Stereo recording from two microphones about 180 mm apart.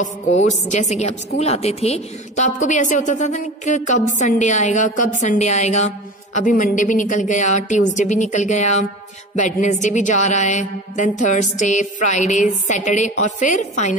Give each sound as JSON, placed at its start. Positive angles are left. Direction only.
{"t": 0.4, "sound": "music", "side_deg": 40}
{"t": 1.4, "sound": "a woman's voice", "side_deg": 35}
{"t": 5.2, "sound": "music", "side_deg": 40}